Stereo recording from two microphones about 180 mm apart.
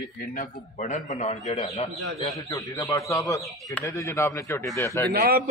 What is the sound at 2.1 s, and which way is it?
Speech, 20° left (ahead or behind).